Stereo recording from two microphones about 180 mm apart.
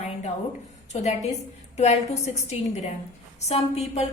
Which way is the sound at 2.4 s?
40° left (ahead or behind).